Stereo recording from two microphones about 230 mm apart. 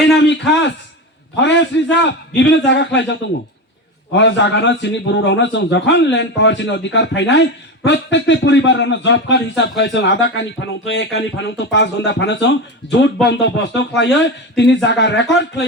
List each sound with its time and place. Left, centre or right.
0.2 s speech: left